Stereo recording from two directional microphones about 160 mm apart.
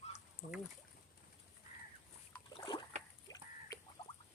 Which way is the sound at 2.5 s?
30° left (ahead or behind).